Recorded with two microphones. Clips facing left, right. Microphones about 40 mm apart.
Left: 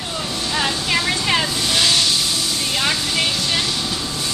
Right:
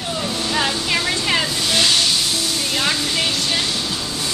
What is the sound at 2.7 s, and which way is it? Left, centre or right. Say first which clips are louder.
Speech: even; centre.